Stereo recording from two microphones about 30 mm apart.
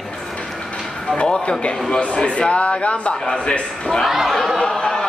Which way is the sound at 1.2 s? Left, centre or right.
Left.